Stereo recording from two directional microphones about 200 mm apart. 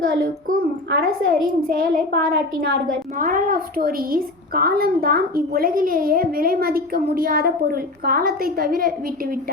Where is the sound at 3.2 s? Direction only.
40° right (ahead or behind).